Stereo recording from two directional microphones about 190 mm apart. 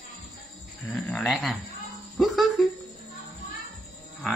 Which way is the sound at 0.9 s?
5° left (ahead or behind).